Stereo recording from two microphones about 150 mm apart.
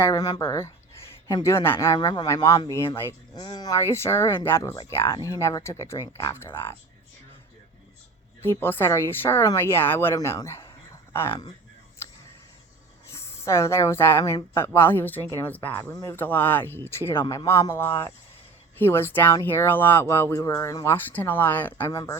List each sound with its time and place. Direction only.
0.0 s speech: 25° left (ahead or behind)
3.4 s speech: 30° left (ahead or behind)
8.4 s speech: 15° left (ahead or behind)
13.1 s a woman's voice: 20° left (ahead or behind)
15.9 s speech: 20° left (ahead or behind)